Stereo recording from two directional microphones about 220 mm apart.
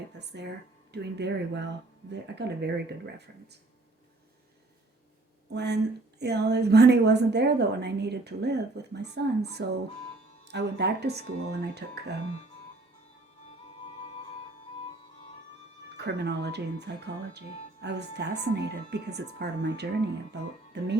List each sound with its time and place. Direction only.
0.2 s a woman's voice: 50° right (ahead or behind)
5.5 s a woman's voice: 50° right (ahead or behind)
12.2 s speech: 30° left (ahead or behind)
16.0 s a woman's voice: 50° right (ahead or behind)